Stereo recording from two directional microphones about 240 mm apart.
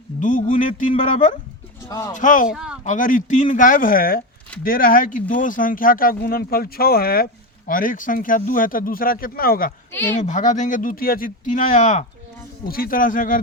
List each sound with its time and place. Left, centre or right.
0.2 s speech: left
1.9 s speech: centre
2.1 s speech: left
2.5 s speech: centre
2.8 s speech: left